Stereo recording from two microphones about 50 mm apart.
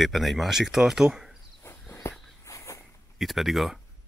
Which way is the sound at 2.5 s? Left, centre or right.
Left.